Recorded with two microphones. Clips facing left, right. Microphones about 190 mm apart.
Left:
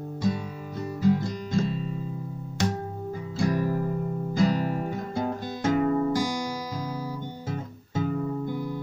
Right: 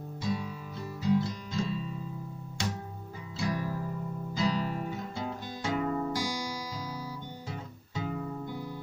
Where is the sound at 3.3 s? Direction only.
50° left (ahead or behind).